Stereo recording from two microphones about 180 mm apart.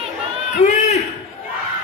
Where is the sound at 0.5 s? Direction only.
40° left (ahead or behind).